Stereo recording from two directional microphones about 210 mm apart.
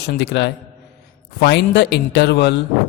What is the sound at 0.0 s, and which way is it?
A man's voice, 55° left (ahead or behind).